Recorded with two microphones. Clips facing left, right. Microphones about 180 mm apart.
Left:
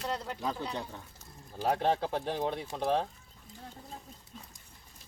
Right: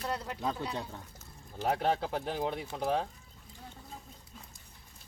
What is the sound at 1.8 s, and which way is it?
Speech, 25° left (ahead or behind).